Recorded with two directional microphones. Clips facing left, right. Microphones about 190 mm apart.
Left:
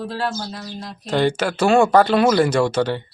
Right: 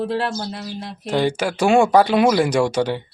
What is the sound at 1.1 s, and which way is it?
Speech, 10° right (ahead or behind).